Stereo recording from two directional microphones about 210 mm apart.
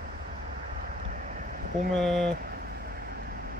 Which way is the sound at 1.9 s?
Centre (ahead or behind).